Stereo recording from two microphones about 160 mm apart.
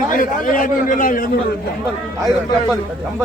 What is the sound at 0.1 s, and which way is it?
A man's voice, 60° left (ahead or behind).